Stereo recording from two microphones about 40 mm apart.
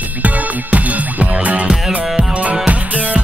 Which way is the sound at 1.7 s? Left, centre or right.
Centre.